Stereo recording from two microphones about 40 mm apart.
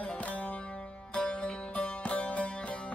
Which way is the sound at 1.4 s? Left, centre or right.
Left.